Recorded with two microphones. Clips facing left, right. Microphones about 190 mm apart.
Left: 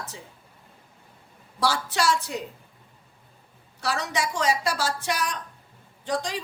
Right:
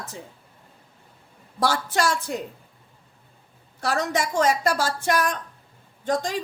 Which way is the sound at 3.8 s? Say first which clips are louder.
Right 3 dB; 50° right (ahead or behind).